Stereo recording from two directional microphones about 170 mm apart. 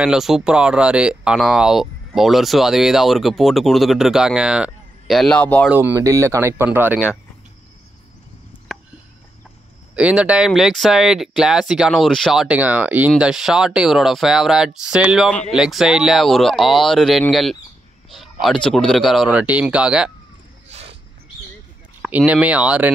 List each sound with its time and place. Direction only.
0.0 s speech: 5° right (ahead or behind)
5.7 s speech: 10° right (ahead or behind)
9.9 s speech: 5° right (ahead or behind)
20.6 s a sound: 40° right (ahead or behind)
22.0 s speech: 10° right (ahead or behind)